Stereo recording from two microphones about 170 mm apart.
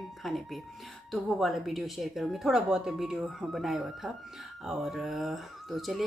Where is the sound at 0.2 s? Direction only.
Centre (ahead or behind).